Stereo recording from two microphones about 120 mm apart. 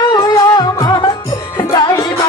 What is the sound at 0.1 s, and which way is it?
Music, 35° left (ahead or behind).